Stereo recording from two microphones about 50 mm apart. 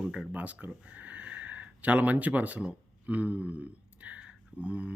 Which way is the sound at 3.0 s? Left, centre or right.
Right.